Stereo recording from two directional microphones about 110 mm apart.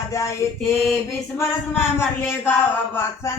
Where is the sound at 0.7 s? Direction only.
Centre (ahead or behind).